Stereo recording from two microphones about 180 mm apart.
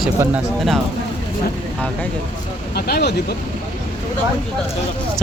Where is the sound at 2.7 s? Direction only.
60° left (ahead or behind).